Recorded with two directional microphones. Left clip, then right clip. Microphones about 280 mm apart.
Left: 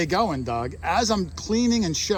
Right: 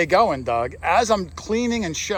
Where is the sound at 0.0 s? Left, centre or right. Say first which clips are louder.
Right 6 dB; centre.